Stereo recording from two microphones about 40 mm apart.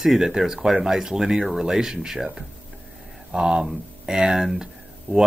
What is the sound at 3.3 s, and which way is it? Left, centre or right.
Speech, right.